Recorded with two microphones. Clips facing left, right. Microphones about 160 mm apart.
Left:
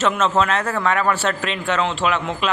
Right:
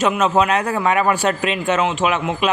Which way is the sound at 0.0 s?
15° right (ahead or behind).